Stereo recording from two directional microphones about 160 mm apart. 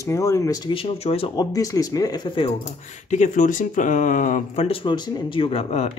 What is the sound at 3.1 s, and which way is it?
Speech, 50° left (ahead or behind).